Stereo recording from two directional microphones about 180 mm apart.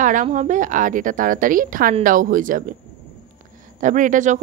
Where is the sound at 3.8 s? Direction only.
45° right (ahead or behind).